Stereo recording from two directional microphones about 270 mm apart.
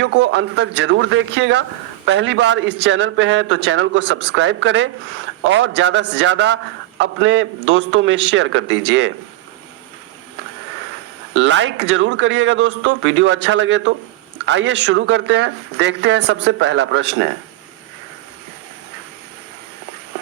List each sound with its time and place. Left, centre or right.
0.0 s a man's voice: right
11.3 s speech: right